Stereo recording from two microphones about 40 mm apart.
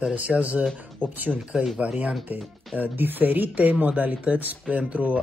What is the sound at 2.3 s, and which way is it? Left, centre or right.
Speech, right.